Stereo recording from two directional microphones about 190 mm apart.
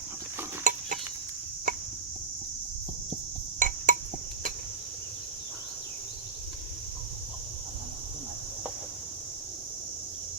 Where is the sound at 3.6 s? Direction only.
45° right (ahead or behind).